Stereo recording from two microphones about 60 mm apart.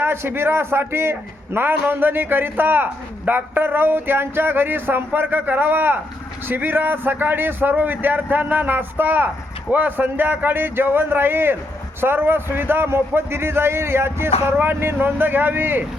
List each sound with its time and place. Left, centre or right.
0.0 s a man's voice: right